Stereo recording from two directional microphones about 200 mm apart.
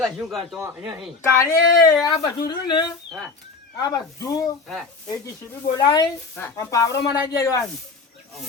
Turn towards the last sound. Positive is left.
turn(degrees=15)  # may be behind; listen again after turning